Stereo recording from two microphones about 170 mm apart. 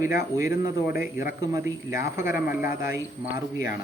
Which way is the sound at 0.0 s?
15° right (ahead or behind).